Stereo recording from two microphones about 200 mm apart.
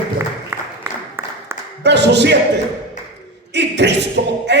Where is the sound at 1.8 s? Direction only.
60° right (ahead or behind).